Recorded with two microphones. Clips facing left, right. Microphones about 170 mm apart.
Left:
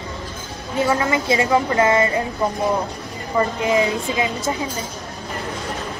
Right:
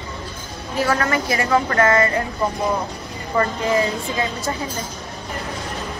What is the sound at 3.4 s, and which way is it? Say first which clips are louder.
A woman's voice: left 1 dB; 15° left (ahead or behind).